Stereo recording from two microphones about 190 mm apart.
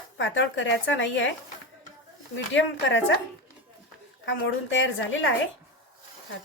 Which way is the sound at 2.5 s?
80° left.